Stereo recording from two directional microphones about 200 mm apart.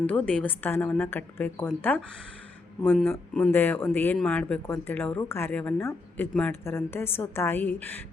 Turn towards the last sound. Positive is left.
turn(degrees=10)  # may be behind; listen again after turning